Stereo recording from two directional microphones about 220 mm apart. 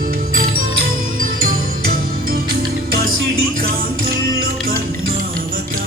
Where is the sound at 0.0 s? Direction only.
40° right (ahead or behind).